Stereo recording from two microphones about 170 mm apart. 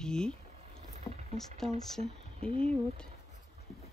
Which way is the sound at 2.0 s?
35° right (ahead or behind).